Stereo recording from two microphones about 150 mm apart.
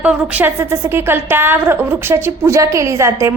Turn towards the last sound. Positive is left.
turn(degrees=-20)  # may be behind; listen again after turning